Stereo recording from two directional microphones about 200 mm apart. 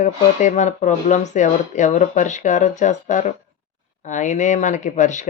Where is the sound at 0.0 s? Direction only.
35° left (ahead or behind).